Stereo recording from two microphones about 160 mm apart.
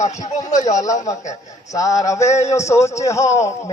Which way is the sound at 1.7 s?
20° left (ahead or behind).